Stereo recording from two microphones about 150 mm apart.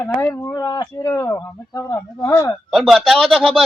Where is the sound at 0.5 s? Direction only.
25° left (ahead or behind).